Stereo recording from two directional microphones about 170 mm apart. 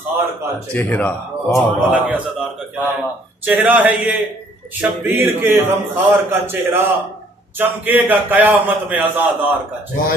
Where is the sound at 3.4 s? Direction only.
10° right (ahead or behind).